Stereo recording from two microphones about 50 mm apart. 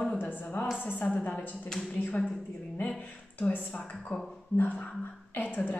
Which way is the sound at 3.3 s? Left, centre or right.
Left.